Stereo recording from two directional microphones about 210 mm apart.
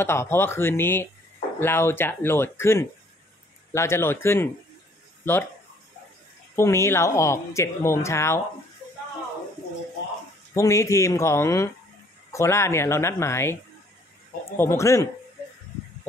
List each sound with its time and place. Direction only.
0.0 s speech: 10° left (ahead or behind)
6.5 s speech: 15° left (ahead or behind)
10.5 s speech: 15° left (ahead or behind)
14.6 s speech: 15° left (ahead or behind)